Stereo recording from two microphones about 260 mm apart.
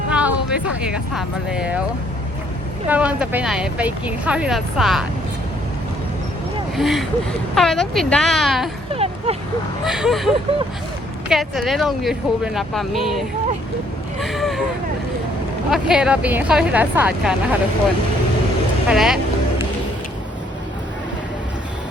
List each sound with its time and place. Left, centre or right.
0.1 s music: centre
1.1 s speech: centre
2.9 s speech: centre
6.7 s speech: centre
9.0 s a sound: right
9.8 s speech: centre
14.2 s a sound: centre
15.7 s speech: centre
18.9 s speech: centre